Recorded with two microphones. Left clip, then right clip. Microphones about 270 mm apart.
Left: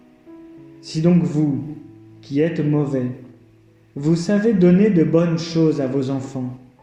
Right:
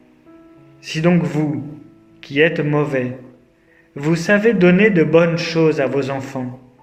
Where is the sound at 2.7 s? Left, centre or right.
Right.